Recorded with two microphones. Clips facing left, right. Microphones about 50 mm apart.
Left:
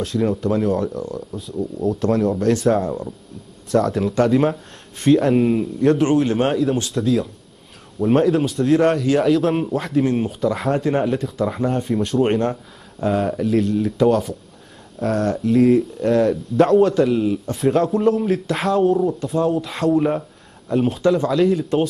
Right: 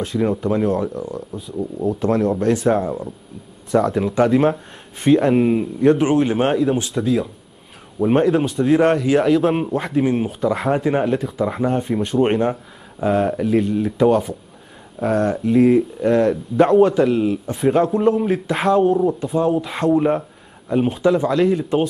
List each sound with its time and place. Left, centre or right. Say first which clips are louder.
0.0 s speech: even; centre